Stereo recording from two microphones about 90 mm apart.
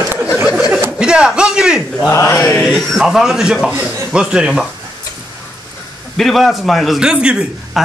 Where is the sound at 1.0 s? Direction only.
10° right (ahead or behind).